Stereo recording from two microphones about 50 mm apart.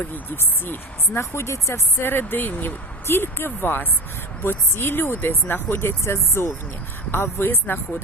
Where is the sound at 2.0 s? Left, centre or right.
Left.